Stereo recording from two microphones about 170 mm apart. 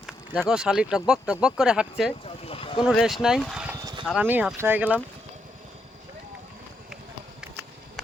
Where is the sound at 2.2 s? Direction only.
35° left (ahead or behind).